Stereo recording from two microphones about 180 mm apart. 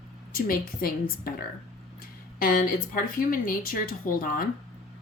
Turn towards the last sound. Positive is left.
turn(degrees=50)  # may be behind; listen again after turning